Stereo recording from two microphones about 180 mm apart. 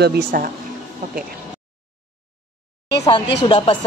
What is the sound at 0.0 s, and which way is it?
Speech, 60° right (ahead or behind).